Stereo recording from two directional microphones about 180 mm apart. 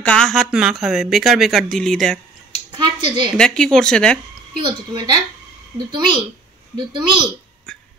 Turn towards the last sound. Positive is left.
turn(degrees=-25)  # may be behind; listen again after turning